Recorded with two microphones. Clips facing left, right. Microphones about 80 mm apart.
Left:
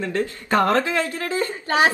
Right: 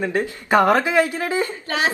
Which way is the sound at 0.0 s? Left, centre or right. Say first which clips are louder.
Right 2 dB; centre.